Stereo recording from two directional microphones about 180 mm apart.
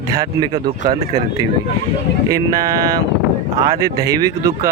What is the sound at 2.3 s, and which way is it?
Speech, 20° right (ahead or behind).